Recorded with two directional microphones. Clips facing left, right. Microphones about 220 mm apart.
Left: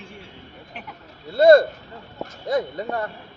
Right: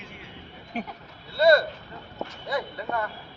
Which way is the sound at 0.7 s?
40° right (ahead or behind).